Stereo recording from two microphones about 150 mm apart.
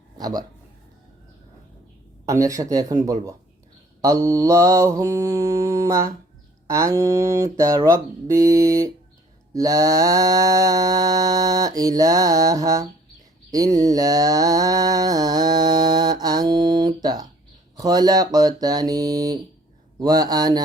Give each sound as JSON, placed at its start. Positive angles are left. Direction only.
{"t": 0.2, "sound": "speech", "side_deg": -25}
{"t": 2.2, "sound": "mantra", "side_deg": -20}